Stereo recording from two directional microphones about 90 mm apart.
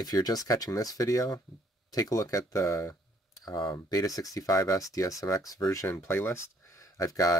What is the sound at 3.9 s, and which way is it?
Speech, 40° left (ahead or behind).